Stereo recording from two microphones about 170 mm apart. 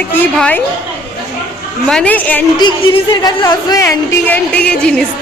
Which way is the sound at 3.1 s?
25° left (ahead or behind).